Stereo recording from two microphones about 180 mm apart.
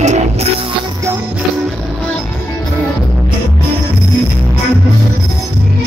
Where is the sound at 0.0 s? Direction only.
40° right (ahead or behind).